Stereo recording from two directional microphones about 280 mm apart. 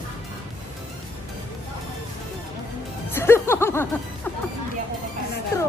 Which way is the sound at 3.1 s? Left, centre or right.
Centre.